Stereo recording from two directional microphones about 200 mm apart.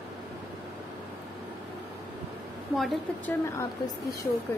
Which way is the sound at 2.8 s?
Centre (ahead or behind).